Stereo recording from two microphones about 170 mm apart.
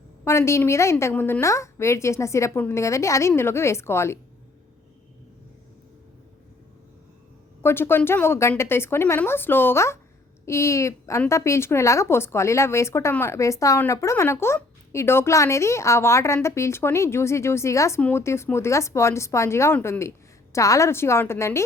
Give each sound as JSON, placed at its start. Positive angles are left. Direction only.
{"t": 0.3, "sound": "speech", "side_deg": 15}
{"t": 7.6, "sound": "speech", "side_deg": 15}